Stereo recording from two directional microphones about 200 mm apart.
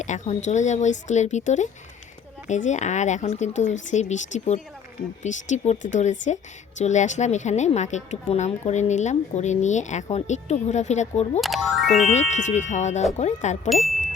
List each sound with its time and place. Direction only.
0.0 s speech: 35° left (ahead or behind)
11.3 s speech: centre (ahead or behind)
12.0 s speech: 35° left (ahead or behind)
13.7 s speech: centre (ahead or behind)